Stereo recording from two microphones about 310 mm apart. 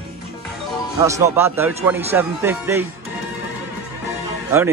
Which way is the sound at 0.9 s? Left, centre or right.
Centre.